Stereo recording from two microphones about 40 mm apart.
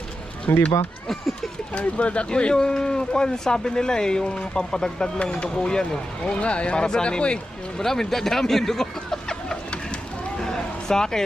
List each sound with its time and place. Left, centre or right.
1.0 s speech: centre
1.7 s speech: left
7.8 s speech: centre
10.4 s a sound: centre